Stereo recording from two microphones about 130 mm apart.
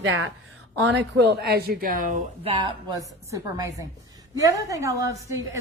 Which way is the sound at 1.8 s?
90° right.